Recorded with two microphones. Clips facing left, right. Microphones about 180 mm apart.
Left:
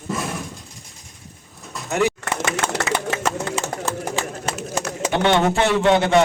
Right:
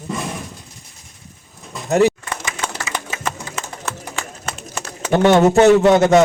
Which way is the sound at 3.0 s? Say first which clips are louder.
Left 5 dB; 70° left (ahead or behind).